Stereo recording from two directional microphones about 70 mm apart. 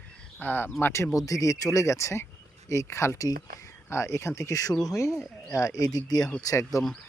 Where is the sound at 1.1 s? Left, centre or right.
Left.